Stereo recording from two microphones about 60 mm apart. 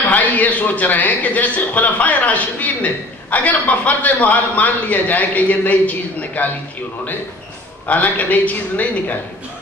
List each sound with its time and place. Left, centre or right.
0.1 s a man's voice: left
7.8 s a man's voice: left